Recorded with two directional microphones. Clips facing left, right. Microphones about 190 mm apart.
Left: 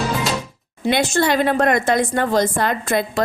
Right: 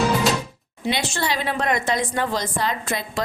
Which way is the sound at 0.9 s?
50° left (ahead or behind).